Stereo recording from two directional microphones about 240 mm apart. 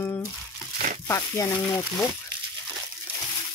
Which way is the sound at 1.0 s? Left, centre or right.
Centre.